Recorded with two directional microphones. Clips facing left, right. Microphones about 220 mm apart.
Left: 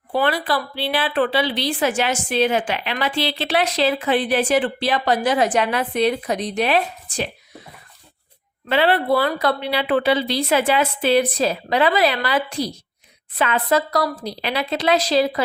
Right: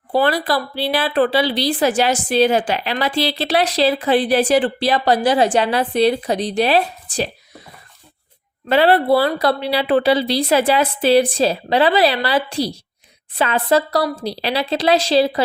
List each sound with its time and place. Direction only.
0.1 s a woman's voice: 40° right (ahead or behind)
8.7 s a woman's voice: 40° right (ahead or behind)